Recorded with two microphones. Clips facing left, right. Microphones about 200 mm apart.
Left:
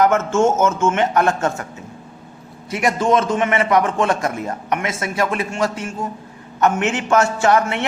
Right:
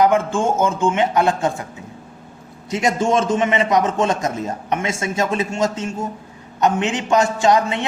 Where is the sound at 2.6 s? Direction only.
25° right (ahead or behind).